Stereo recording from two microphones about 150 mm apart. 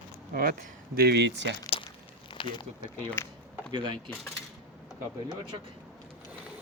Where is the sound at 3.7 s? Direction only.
30° right (ahead or behind).